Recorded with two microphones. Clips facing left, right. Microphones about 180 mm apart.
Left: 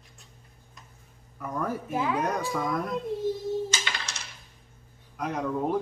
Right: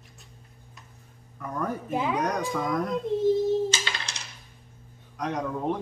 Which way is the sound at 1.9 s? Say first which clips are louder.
Right 1 dB; 20° right (ahead or behind).